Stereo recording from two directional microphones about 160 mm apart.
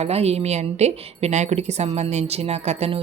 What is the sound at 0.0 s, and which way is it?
A woman's voice, 40° right (ahead or behind).